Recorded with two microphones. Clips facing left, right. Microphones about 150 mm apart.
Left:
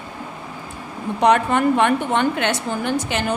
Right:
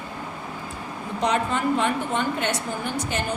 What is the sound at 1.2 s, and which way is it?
A woman's voice, 65° left (ahead or behind).